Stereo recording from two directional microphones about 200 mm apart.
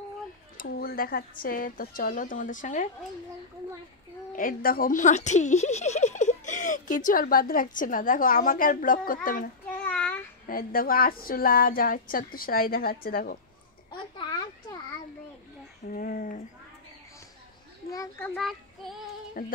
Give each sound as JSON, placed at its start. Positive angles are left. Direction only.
{"t": 0.6, "sound": "speech", "side_deg": 50}
{"t": 4.3, "sound": "speech", "side_deg": 45}
{"t": 9.8, "sound": "child singing", "side_deg": 5}
{"t": 10.4, "sound": "speech", "side_deg": 45}
{"t": 14.1, "sound": "a sound", "side_deg": 20}
{"t": 15.9, "sound": "a sound", "side_deg": 45}
{"t": 17.9, "sound": "children playing", "side_deg": 15}
{"t": 18.3, "sound": "child singing", "side_deg": 0}
{"t": 19.4, "sound": "speech", "side_deg": 45}